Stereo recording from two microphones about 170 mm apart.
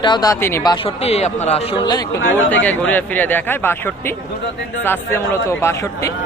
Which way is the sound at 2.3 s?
10° left (ahead or behind).